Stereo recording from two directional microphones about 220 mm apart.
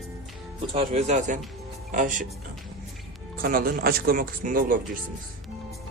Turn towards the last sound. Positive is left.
turn(degrees=-40)  # may be behind; listen again after turning